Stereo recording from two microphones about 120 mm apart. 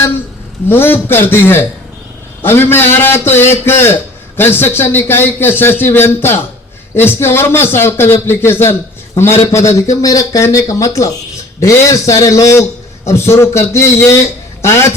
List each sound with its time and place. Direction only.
0.7 s a man's voice: 20° left (ahead or behind)